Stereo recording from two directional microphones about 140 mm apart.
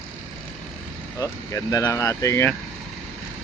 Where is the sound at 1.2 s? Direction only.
20° left (ahead or behind).